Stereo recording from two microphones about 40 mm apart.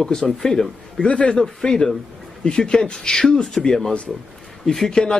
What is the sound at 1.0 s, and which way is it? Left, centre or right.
Speech, left.